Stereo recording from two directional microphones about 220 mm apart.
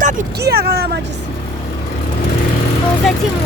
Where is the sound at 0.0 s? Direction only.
45° right (ahead or behind).